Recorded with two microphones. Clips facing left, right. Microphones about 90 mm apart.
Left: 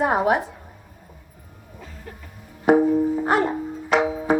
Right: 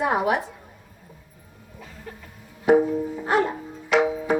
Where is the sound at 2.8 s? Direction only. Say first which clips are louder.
Left 6 dB; 40° left (ahead or behind).